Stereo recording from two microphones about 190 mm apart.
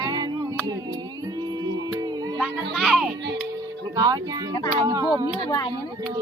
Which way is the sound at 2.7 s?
Centre (ahead or behind).